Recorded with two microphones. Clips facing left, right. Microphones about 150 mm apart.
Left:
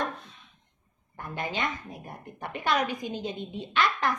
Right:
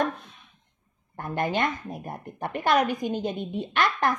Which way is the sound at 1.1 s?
55° right (ahead or behind).